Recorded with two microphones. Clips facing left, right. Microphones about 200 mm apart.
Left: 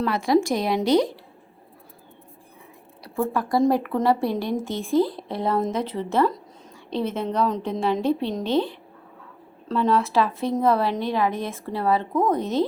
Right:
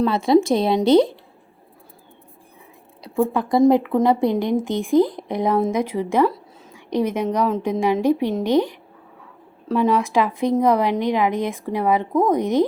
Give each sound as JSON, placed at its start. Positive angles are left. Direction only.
{"t": 0.0, "sound": "a woman's voice", "side_deg": -25}
{"t": 3.2, "sound": "a woman's voice", "side_deg": -15}